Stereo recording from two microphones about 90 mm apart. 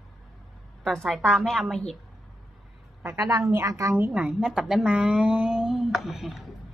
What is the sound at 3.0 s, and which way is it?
A woman's voice, 35° right (ahead or behind).